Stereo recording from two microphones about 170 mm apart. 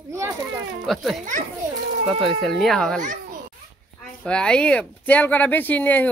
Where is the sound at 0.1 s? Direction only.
15° right (ahead or behind).